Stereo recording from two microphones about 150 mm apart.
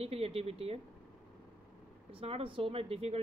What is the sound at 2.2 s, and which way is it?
Speech, 40° right (ahead or behind).